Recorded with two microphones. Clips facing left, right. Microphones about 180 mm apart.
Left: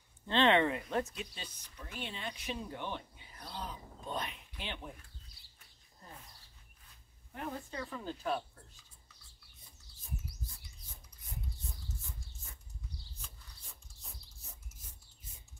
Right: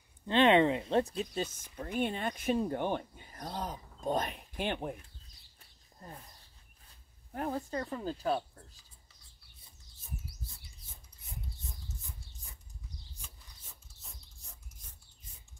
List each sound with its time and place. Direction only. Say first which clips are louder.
0.3 s speech: right 4 dB; 15° right (ahead or behind); by 4.9 s 50° right (ahead or behind)
7.3 s speech: right 6 dB; 40° right (ahead or behind)
13.2 s mechanisms: even; 5° right (ahead or behind)